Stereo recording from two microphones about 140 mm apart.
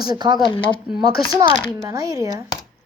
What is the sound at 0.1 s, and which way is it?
Speech, 30° right (ahead or behind).